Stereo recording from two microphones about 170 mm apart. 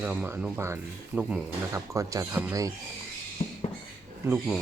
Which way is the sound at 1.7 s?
20° right (ahead or behind).